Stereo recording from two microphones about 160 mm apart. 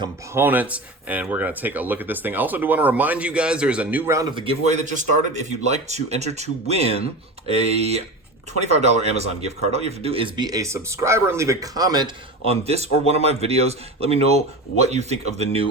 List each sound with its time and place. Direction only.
0.3 s speech: 10° right (ahead or behind)
4.4 s speech: 40° right (ahead or behind); by 12.1 s 25° right (ahead or behind)
12.5 s speech: 40° right (ahead or behind)